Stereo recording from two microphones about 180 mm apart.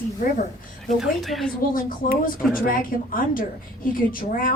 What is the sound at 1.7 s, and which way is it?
Speech, 50° left (ahead or behind).